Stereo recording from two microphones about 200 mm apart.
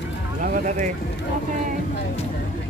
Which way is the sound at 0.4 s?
40° right (ahead or behind).